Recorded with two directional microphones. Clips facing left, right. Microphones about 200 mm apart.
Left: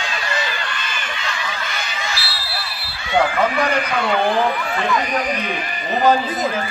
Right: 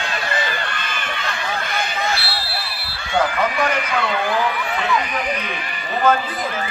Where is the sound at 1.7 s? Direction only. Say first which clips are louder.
Right 5 dB; 55° right (ahead or behind).